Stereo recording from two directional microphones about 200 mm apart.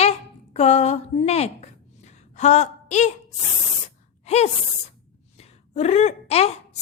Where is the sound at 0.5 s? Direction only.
30° left (ahead or behind).